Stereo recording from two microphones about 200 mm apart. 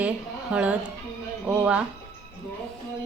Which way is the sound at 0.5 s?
5° right (ahead or behind).